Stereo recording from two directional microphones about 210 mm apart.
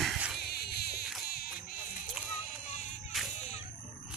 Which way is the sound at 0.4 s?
50° left (ahead or behind).